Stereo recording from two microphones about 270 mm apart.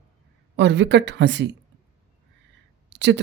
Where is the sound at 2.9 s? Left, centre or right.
Right.